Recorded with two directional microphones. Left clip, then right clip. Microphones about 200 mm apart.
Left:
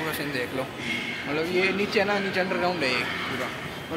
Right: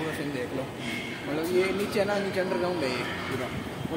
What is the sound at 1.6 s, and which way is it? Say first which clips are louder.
Speech: left 5 dB; 15° left (ahead or behind).